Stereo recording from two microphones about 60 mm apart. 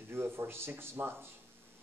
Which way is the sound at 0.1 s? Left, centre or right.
Right.